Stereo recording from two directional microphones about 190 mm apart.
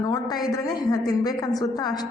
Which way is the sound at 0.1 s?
20° left (ahead or behind).